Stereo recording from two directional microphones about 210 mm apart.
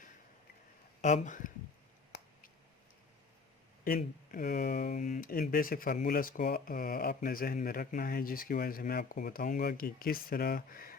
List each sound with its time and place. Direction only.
1.0 s speech: 35° left (ahead or behind)
3.8 s speech: 45° left (ahead or behind)